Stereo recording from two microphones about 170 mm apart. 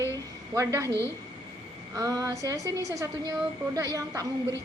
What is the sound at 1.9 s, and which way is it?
A woman's voice, 20° right (ahead or behind).